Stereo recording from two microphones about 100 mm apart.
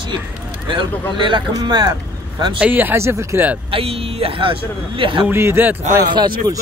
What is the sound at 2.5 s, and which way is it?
Speech, 15° right (ahead or behind).